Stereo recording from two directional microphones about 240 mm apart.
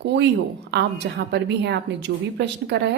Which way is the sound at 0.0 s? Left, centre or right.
Right.